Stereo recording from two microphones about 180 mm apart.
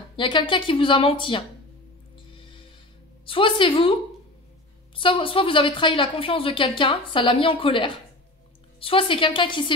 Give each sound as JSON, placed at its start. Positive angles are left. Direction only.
{"t": 0.1, "sound": "a woman's voice", "side_deg": 25}
{"t": 2.1, "sound": "music", "side_deg": 30}
{"t": 3.3, "sound": "a woman's voice", "side_deg": 30}
{"t": 4.9, "sound": "a woman's voice", "side_deg": 30}